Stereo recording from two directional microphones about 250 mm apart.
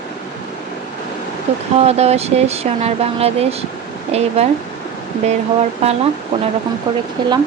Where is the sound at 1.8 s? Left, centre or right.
Right.